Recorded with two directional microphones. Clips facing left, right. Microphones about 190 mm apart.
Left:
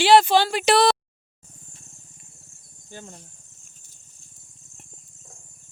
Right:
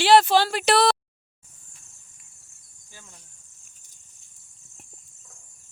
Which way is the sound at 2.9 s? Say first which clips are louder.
Left 11 dB; 55° left (ahead or behind).